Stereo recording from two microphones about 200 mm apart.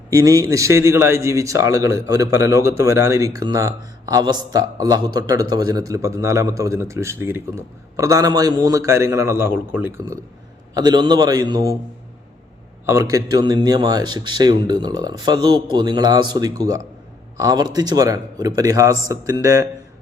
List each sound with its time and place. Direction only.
0.1 s a man's voice: 15° right (ahead or behind)
10.8 s speech: 20° right (ahead or behind)
12.8 s a man's voice: 15° right (ahead or behind)